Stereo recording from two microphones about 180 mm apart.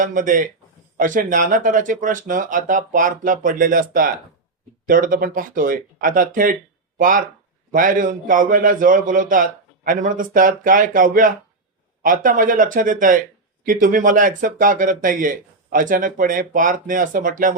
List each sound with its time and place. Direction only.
0.0 s speech: 45° right (ahead or behind)